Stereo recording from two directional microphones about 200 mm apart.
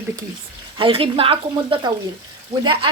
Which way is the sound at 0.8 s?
25° right (ahead or behind).